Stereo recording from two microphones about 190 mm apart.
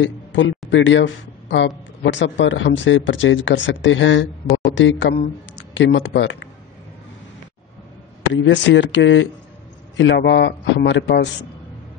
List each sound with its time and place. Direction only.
0.0 s speech: 80° left
8.3 s speech: 75° left (ahead or behind)